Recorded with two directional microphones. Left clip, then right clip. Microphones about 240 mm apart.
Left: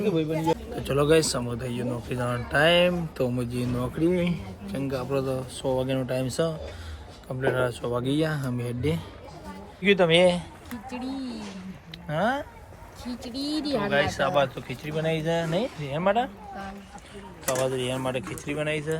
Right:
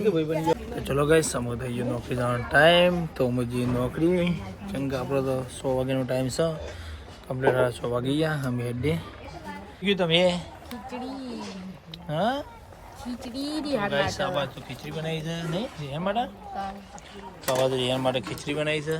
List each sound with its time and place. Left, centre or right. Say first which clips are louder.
0.0 s speech: right 1 dB; centre
0.8 s speech: left 1 dB; centre
9.8 s speech: left 3 dB; centre
12.0 s speech: left 1 dB; centre
13.1 s speech: left 1 dB; centre
17.4 s speech: right 2 dB; centre